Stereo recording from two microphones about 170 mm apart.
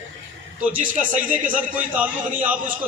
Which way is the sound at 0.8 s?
50° right (ahead or behind).